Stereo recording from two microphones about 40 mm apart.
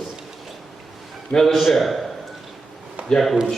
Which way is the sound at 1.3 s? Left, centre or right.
Centre.